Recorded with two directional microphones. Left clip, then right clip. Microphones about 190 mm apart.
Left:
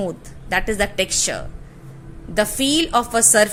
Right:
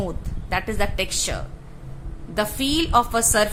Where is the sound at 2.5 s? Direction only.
15° left (ahead or behind).